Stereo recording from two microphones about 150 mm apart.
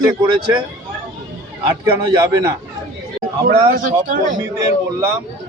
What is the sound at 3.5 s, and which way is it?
Speech, 65° right (ahead or behind).